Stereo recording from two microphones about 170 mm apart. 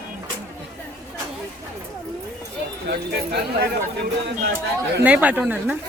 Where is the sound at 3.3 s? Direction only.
65° right (ahead or behind).